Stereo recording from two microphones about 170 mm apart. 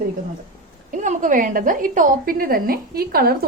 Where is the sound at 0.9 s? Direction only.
50° right (ahead or behind).